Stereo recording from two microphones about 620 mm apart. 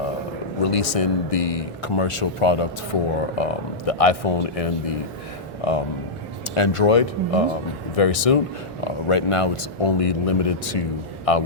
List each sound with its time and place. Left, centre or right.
0.6 s speech: left
6.5 s speech: left